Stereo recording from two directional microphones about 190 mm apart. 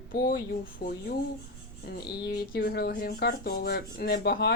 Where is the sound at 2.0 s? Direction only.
55° left (ahead or behind).